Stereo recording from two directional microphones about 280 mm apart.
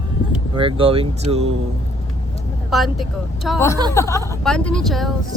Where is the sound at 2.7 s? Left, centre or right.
Centre.